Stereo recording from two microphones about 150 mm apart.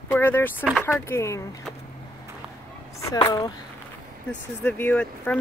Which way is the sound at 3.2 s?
30° left (ahead or behind).